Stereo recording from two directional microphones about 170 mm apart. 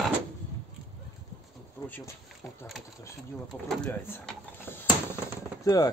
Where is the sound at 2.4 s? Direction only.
Centre (ahead or behind).